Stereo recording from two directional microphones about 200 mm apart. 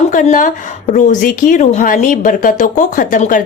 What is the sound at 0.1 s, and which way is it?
A woman's voice, 40° left (ahead or behind).